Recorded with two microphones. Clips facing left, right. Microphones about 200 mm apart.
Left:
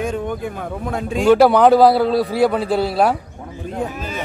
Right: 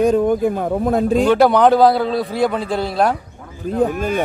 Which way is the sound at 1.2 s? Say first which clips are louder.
Left 3 dB; 5° left (ahead or behind).